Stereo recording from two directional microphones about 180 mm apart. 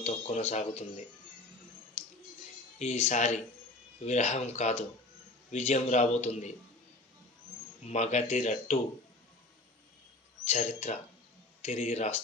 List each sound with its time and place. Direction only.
0.0 s a man's voice: 35° left (ahead or behind)
2.8 s a man's voice: 40° left (ahead or behind)
7.8 s a man's voice: 40° left (ahead or behind)
10.5 s a man's voice: 40° left (ahead or behind)